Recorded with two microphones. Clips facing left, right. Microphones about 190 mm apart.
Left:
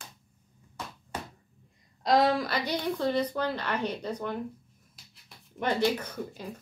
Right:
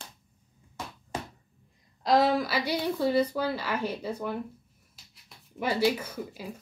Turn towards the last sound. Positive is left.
turn(degrees=-5)  # may be behind; listen again after turning